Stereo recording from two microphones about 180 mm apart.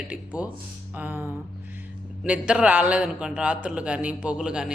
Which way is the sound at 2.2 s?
5° right (ahead or behind).